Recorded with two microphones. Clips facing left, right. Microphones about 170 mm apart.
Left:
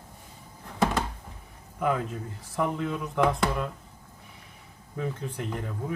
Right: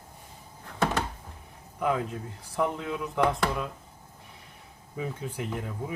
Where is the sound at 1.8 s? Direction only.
Centre (ahead or behind).